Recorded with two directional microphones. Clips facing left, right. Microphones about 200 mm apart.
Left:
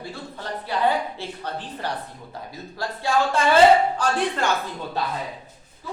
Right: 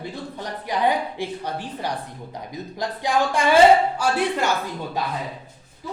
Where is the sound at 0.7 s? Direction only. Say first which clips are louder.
Right 1 dB; 15° right (ahead or behind).